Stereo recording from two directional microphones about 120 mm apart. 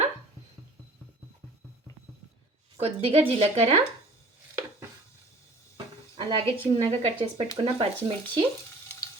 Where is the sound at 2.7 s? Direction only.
55° right (ahead or behind).